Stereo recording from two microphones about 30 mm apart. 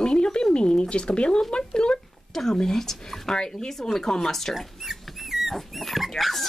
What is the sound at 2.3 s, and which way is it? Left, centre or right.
Speech, centre.